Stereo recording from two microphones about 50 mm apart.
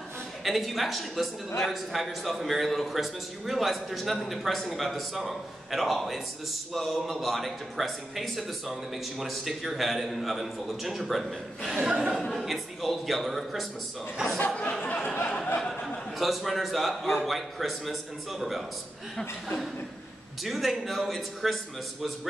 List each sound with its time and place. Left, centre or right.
0.4 s a man's voice: centre
11.7 s a man's voice: centre
14.5 s a sound: left
16.2 s a man's voice: centre
20.4 s a man's voice: centre